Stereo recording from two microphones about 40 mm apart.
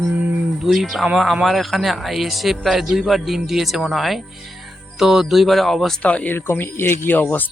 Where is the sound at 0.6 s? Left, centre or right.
Centre.